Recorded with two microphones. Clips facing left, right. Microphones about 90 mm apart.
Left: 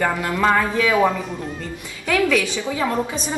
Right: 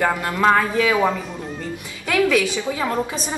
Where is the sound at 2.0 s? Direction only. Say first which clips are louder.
Right 1 dB; 15° right (ahead or behind).